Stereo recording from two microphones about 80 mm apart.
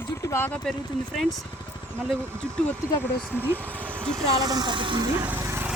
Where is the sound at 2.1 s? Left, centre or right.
Centre.